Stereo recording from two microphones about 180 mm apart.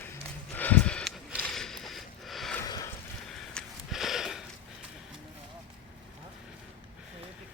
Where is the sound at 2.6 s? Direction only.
20° left (ahead or behind).